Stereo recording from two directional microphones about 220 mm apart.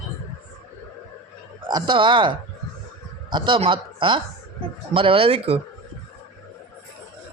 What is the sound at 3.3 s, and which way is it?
Speech, 20° right (ahead or behind).